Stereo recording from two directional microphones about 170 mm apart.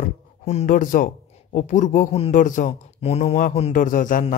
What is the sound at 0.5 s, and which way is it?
A man's voice, 45° left (ahead or behind).